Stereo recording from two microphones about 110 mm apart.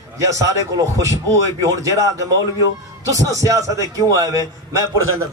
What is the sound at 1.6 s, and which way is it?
A man's voice, 30° right (ahead or behind).